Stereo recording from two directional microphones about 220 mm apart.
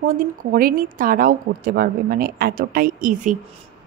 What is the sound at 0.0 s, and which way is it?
Speech, 40° right (ahead or behind).